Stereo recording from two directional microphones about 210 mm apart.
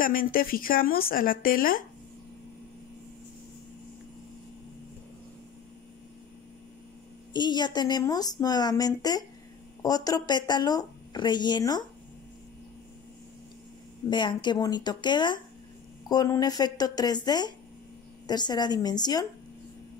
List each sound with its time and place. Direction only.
0.0 s speech: 40° left (ahead or behind)
7.3 s a woman's voice: 20° left (ahead or behind)
14.1 s a woman's voice: 20° left (ahead or behind)